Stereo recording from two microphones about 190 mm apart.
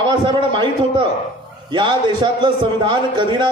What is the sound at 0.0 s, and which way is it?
A man's voice, 25° right (ahead or behind).